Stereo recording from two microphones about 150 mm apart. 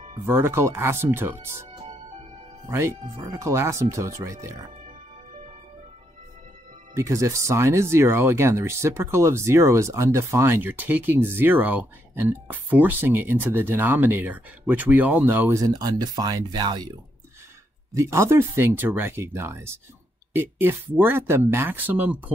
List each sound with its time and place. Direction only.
0.3 s speech: 15° right (ahead or behind)
2.7 s speech: 20° right (ahead or behind)
7.0 s speech: 20° right (ahead or behind)
17.9 s speech: 20° right (ahead or behind)